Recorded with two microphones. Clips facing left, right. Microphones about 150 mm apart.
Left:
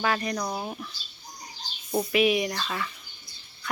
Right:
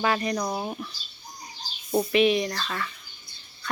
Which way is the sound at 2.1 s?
10° left (ahead or behind).